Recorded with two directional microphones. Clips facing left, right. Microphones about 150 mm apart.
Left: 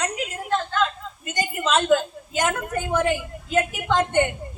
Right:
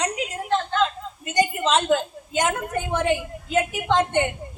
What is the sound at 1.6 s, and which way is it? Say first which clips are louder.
A woman's voice: left 1 dB; 20° right (ahead or behind).